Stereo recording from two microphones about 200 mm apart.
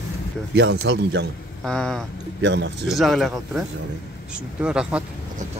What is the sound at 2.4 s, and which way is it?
Speech, 60° right (ahead or behind).